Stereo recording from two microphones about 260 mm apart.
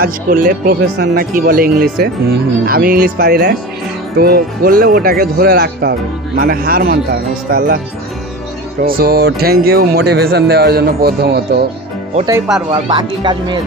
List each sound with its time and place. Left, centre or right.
0.0 s speech: right
8.8 s speech: right
12.1 s speech: centre